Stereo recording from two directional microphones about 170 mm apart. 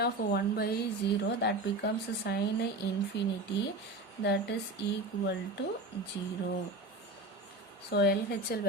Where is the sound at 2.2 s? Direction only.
75° left (ahead or behind).